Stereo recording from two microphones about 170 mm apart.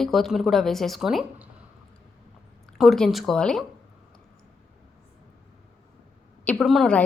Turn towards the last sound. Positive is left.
turn(degrees=5)  # may be behind; listen again after turning